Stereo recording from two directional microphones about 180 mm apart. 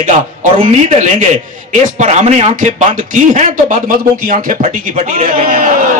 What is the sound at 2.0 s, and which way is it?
A man's voice, 40° right (ahead or behind).